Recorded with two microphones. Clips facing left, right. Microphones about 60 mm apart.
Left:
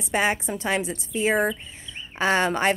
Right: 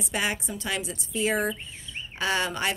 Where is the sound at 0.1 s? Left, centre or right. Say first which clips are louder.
Left 6 dB; left.